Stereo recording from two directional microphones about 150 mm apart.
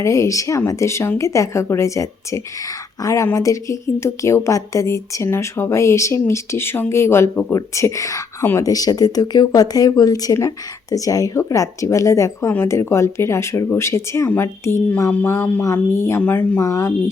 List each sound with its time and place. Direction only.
0.0 s a woman's voice: 20° left (ahead or behind)